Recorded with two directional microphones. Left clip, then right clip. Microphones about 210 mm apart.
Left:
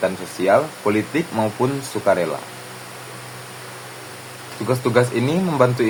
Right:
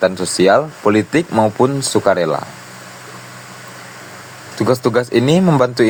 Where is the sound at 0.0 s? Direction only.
45° right (ahead or behind).